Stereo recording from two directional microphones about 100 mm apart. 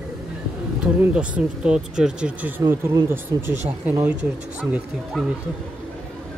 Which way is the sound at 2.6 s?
25° right (ahead or behind).